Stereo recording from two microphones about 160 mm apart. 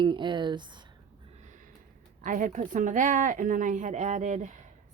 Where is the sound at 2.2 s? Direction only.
55° right (ahead or behind).